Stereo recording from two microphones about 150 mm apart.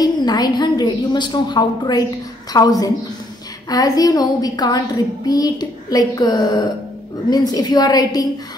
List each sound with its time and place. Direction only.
0.0 s a woman's voice: 25° left (ahead or behind)